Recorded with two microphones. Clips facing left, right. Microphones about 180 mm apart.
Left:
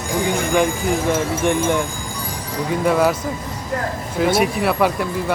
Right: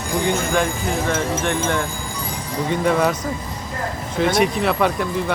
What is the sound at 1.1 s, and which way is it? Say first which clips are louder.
Speech: left 3 dB; 15° left (ahead or behind).